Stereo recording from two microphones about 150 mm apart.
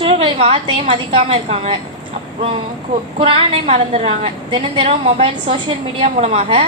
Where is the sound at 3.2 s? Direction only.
40° right (ahead or behind).